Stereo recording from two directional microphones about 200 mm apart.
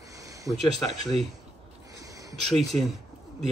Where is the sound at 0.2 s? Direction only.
15° right (ahead or behind).